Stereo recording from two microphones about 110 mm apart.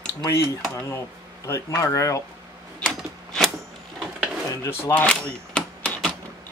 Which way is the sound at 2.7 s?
5° left (ahead or behind).